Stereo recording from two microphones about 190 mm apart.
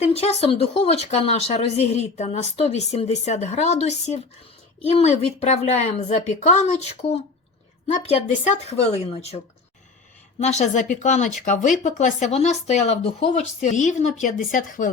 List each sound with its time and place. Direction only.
0.0 s speech: 35° left (ahead or behind)
10.4 s speech: 40° left (ahead or behind)